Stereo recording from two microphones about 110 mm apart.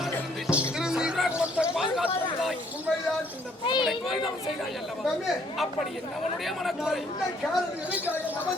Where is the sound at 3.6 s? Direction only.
45° left (ahead or behind).